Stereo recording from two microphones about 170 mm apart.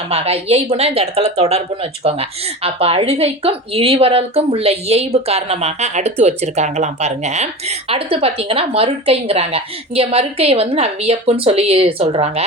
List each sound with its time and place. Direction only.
0.1 s speech: 35° right (ahead or behind)